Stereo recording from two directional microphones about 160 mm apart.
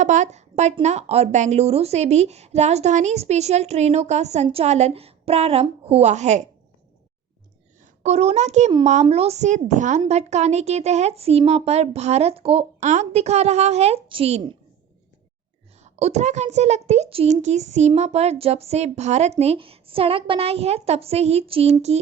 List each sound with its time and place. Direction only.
0.0 s a woman's voice: 50° right (ahead or behind)
8.0 s a woman's voice: 40° right (ahead or behind)
15.8 s a woman's voice: 45° right (ahead or behind)